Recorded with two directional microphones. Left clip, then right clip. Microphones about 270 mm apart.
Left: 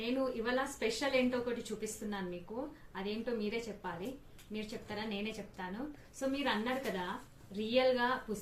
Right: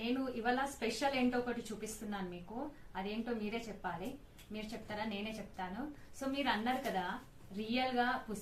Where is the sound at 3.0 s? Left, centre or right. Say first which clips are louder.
Left 4 dB; centre.